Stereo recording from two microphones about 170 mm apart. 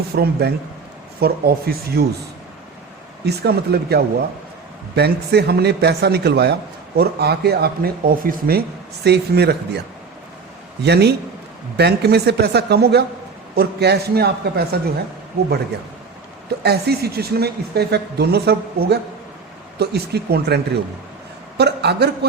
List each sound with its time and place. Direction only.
0.2 s a man's voice: 70° right (ahead or behind)
3.2 s a man's voice: 70° right (ahead or behind)
9.0 s a man's voice: 75° right (ahead or behind)
10.8 s a man's voice: 75° right (ahead or behind)
16.6 s a man's voice: 70° right (ahead or behind)
21.6 s a man's voice: 75° right (ahead or behind)